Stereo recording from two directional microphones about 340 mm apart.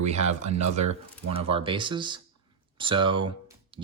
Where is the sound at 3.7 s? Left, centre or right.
Centre.